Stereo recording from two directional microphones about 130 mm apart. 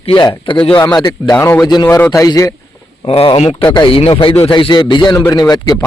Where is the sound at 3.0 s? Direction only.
45° left (ahead or behind).